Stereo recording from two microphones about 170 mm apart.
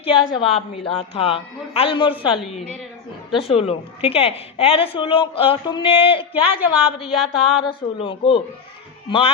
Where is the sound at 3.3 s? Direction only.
35° left (ahead or behind).